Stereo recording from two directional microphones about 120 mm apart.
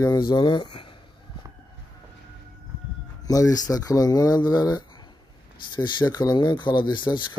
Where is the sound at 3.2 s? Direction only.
30° left (ahead or behind).